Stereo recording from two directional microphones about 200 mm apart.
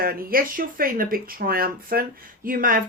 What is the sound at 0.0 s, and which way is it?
Speech, 45° right (ahead or behind).